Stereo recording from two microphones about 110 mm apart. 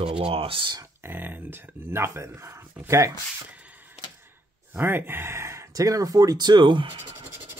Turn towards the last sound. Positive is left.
turn(degrees=-45)  # may be behind; listen again after turning